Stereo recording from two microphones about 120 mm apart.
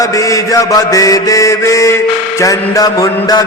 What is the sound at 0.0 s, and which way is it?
Mantra, 30° left (ahead or behind).